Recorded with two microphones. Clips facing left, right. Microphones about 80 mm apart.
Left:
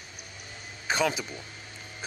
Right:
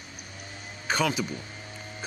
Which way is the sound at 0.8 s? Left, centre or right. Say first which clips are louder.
Even; centre.